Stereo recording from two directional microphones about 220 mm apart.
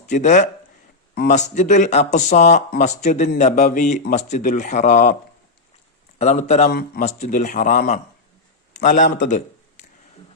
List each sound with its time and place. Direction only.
0.1 s speech: 35° left (ahead or behind)
6.1 s speech: 30° left (ahead or behind)
6.7 s a man's voice: 45° left (ahead or behind)
7.0 s speech: 30° left (ahead or behind)